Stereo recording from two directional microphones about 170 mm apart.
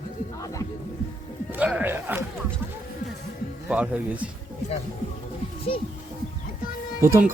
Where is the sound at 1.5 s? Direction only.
10° right (ahead or behind).